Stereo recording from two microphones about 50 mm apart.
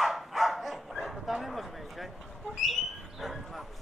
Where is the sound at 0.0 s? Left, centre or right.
Centre.